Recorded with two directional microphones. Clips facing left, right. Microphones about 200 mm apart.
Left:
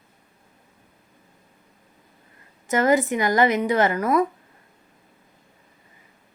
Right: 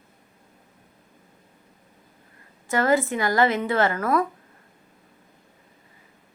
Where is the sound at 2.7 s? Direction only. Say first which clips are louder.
Left 2 dB; 20° left (ahead or behind).